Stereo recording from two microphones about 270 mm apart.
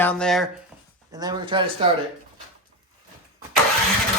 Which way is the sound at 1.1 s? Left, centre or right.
Centre.